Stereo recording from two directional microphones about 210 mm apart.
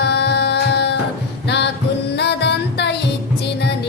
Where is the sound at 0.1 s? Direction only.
55° left (ahead or behind).